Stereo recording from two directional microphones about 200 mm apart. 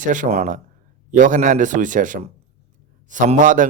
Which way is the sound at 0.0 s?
40° right (ahead or behind).